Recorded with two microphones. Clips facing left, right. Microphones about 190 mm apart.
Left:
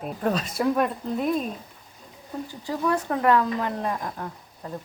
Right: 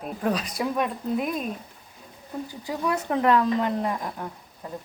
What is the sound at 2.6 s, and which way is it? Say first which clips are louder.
Speech: left 2 dB; 20° right (ahead or behind).